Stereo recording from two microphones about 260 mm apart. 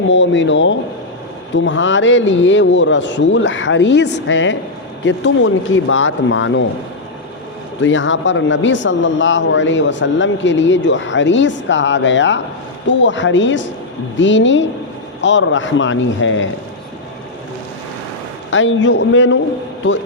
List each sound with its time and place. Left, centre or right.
0.1 s speech: left
7.8 s speech: left
18.5 s speech: left